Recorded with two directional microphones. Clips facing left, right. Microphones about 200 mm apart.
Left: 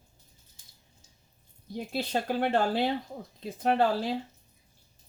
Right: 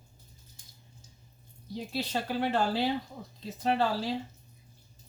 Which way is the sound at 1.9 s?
50° left (ahead or behind).